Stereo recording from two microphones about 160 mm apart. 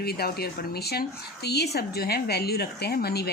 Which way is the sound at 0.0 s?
80° left.